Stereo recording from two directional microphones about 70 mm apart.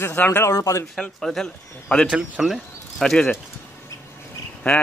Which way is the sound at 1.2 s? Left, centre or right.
Centre.